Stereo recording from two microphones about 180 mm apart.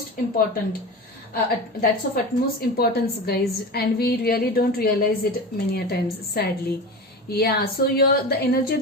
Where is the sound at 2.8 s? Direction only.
60° left (ahead or behind).